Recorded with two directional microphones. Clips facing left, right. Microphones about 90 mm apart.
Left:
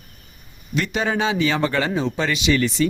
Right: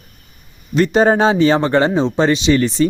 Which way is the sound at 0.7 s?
40° right (ahead or behind).